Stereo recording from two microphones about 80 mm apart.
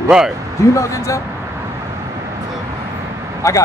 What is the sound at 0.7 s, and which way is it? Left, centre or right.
Speech, left.